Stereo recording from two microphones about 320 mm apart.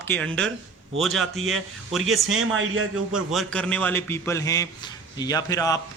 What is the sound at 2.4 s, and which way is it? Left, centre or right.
Speech, right.